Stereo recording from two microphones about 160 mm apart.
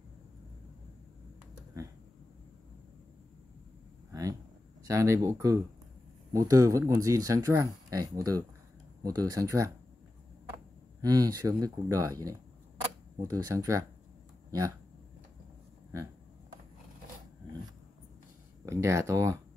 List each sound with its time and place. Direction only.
4.1 s a sound: 20° right (ahead or behind)
4.8 s speech: 20° right (ahead or behind)
11.0 s speech: 20° right (ahead or behind)
18.7 s speech: 20° right (ahead or behind)